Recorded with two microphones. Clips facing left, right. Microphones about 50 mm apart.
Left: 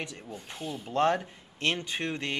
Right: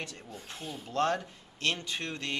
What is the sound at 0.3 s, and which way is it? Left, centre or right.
Speech, centre.